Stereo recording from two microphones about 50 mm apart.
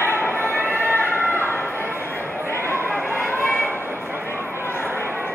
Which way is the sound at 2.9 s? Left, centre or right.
Centre.